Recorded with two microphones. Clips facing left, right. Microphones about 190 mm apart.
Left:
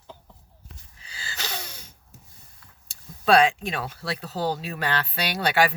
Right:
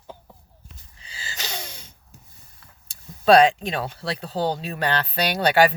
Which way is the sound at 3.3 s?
35° right (ahead or behind).